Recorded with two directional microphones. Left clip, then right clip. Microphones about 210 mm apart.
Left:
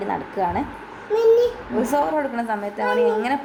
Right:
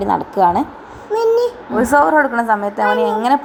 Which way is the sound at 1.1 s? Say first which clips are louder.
Right 2 dB; 20° right (ahead or behind).